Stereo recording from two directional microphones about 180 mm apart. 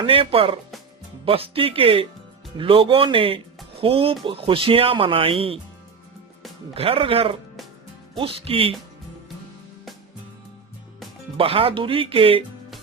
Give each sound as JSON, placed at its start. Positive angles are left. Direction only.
{"t": 0.0, "sound": "speech", "side_deg": -30}
{"t": 6.7, "sound": "speech", "side_deg": -30}
{"t": 11.3, "sound": "speech", "side_deg": -30}